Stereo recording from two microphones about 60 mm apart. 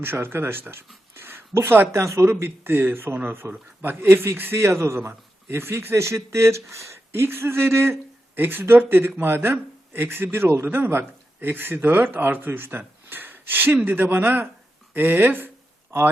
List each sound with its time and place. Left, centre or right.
0.0 s speech: right
1.1 s a sound: right
1.9 s a man's voice: right